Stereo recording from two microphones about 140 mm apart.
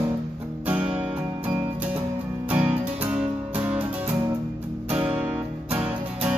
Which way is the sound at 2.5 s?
10° right (ahead or behind).